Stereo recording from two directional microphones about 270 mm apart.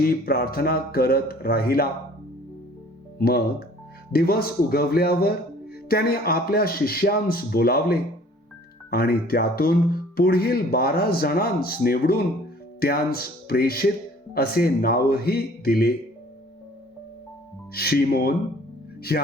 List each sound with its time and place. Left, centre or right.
0.0 s speech: left
3.2 s speech: left
17.7 s speech: left